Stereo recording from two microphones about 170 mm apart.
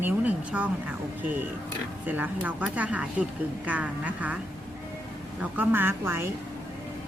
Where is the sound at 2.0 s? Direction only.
10° right (ahead or behind).